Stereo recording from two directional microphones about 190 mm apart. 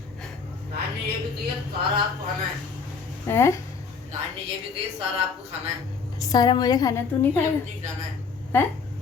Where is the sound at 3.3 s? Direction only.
15° left (ahead or behind).